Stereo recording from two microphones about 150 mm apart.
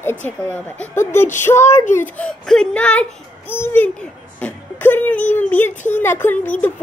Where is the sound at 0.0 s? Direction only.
10° left (ahead or behind).